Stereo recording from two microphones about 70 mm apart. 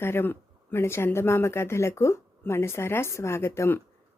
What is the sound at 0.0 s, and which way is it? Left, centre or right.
Speech, left.